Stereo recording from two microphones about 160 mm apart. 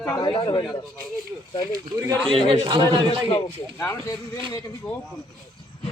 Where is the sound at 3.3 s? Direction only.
15° left (ahead or behind).